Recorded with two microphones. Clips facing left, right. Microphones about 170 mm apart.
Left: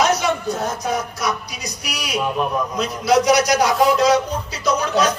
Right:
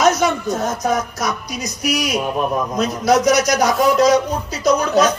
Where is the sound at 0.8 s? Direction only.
45° right (ahead or behind).